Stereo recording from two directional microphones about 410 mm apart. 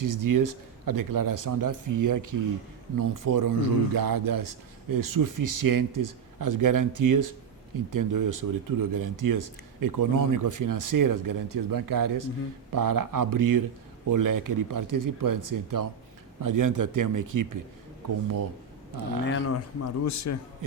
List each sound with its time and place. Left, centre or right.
0.0 s a man's voice: right
19.2 s speech: left